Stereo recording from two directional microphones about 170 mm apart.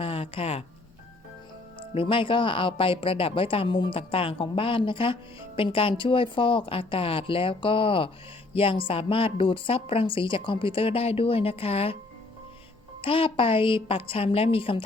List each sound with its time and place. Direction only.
0.0 s a sound: 35° left (ahead or behind)
1.9 s speech: 30° left (ahead or behind)
13.0 s speech: 30° left (ahead or behind)